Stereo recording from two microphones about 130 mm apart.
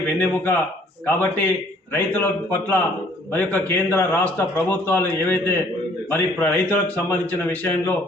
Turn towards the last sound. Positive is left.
turn(degrees=10)  # may be behind; listen again after turning